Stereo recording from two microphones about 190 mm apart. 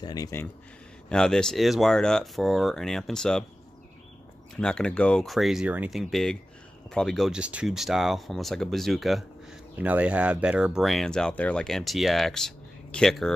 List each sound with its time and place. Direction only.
0.0 s speech: 20° left (ahead or behind)
1.0 s speech: 5° left (ahead or behind)
4.6 s speech: 5° left (ahead or behind)